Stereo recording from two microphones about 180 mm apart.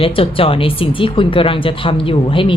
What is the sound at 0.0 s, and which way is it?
A woman's voice, 30° left (ahead or behind).